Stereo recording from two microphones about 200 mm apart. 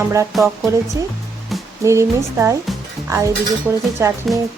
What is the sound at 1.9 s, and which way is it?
Cutlery, 15° right (ahead or behind).